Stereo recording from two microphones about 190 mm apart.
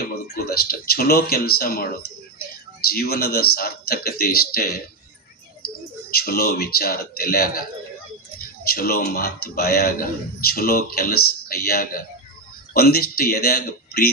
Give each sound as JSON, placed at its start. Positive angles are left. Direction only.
{"t": 0.5, "sound": "a man's voice", "side_deg": 50}
{"t": 8.6, "sound": "a man's voice", "side_deg": 50}